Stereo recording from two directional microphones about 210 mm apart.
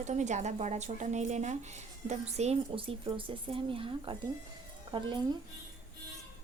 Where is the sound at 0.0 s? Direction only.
35° right (ahead or behind).